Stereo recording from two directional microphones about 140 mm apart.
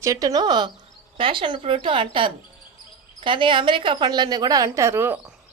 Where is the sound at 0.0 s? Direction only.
25° right (ahead or behind).